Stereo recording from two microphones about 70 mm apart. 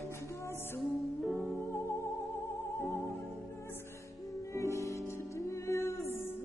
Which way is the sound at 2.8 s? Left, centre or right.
Left.